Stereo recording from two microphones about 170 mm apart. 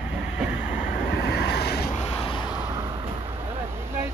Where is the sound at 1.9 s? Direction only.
35° left (ahead or behind).